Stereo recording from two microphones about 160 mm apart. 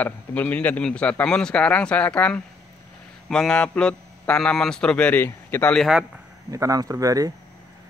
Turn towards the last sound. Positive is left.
turn(degrees=-20)  # may be behind; listen again after turning